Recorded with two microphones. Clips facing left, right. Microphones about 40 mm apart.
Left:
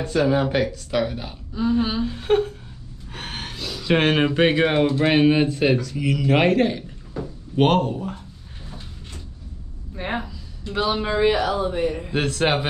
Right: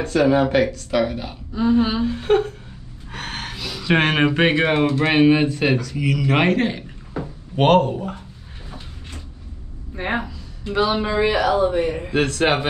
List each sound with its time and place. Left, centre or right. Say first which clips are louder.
0.0 s speech: right 3 dB; centre
1.6 s speech: right 3 dB; centre
3.1 s gasp: right 3 dB; centre
3.5 s a sound: right 1 dB; right
3.8 s speech: right 1 dB; centre
7.2 s a sound: right 2 dB; right
7.6 s speech: right 4 dB; centre
9.9 s speech: right 3 dB; centre
11.5 s speech: right 4 dB; centre
12.1 s speech: right 4 dB; centre